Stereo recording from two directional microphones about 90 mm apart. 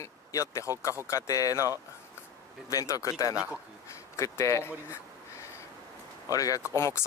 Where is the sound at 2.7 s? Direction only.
40° left (ahead or behind).